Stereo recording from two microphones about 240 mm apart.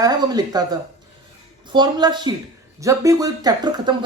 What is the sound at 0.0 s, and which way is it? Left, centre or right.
Speech, centre.